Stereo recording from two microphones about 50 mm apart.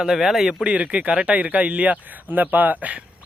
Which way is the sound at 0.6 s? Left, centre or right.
Right.